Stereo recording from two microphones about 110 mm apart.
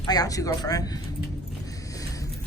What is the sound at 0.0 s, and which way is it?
Speech, 35° left (ahead or behind).